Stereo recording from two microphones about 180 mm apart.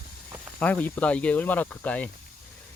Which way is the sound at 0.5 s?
10° left (ahead or behind).